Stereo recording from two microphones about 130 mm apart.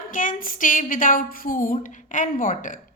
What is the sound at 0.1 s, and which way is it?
A woman's voice, 90° left.